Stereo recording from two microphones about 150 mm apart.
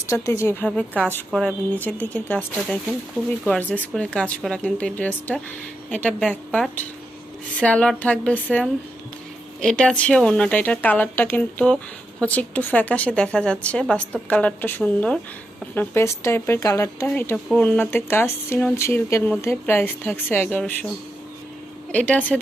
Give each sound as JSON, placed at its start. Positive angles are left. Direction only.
{"t": 0.1, "sound": "speech", "side_deg": 20}
{"t": 21.9, "sound": "speech", "side_deg": 10}